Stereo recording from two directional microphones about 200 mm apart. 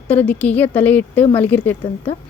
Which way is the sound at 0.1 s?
10° left (ahead or behind).